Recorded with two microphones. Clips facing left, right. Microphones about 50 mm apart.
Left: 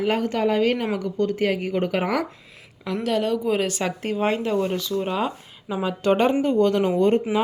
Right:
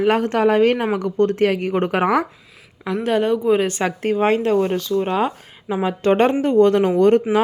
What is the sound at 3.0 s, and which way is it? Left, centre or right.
Speech, right.